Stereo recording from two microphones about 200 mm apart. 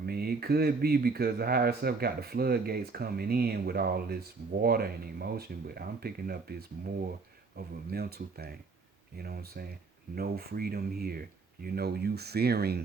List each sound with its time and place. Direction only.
0.0 s speech: 50° right (ahead or behind)